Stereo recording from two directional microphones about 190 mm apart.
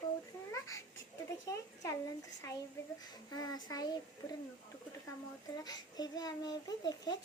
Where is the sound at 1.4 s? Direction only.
20° left (ahead or behind).